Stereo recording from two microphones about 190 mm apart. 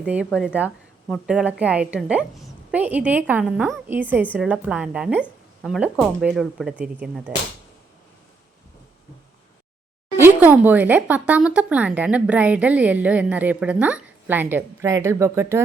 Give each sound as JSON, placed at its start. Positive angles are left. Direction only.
{"t": 0.0, "sound": "a woman's voice", "side_deg": -5}
{"t": 10.2, "sound": "speech", "side_deg": -10}